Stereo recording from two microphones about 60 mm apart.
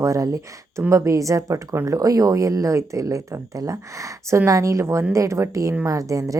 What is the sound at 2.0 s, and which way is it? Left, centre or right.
A woman's voice, right.